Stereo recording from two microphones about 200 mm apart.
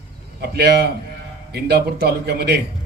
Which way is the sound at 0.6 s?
50° right (ahead or behind).